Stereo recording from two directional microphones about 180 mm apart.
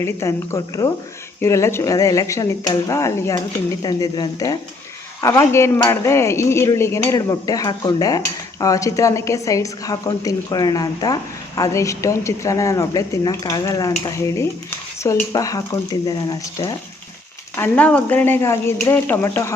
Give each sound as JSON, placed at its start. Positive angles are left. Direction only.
{"t": 0.0, "sound": "a woman's voice", "side_deg": 15}
{"t": 17.6, "sound": "speech", "side_deg": 5}